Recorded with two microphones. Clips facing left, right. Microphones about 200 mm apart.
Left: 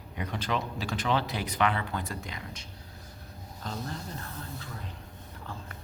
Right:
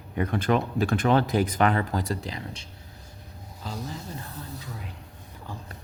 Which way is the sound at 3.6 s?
5° right (ahead or behind).